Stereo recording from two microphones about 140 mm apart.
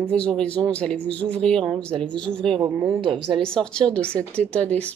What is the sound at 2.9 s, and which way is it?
Speech, 35° right (ahead or behind).